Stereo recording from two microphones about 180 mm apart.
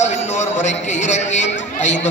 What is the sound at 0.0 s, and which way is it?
A man's voice, 40° left (ahead or behind).